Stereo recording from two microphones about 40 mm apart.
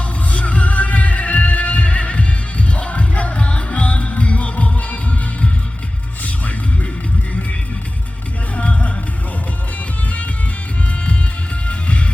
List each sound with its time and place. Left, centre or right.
0.3 s music: left
8.5 s music: left
11.7 s music: left